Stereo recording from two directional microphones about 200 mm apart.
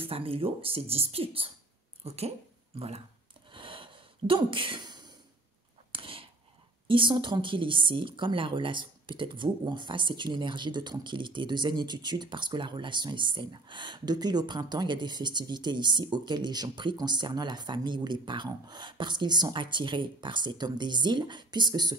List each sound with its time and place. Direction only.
0.0 s a woman's voice: 30° right (ahead or behind)
3.5 s a sound: 25° right (ahead or behind)
6.9 s a woman's voice: 25° right (ahead or behind)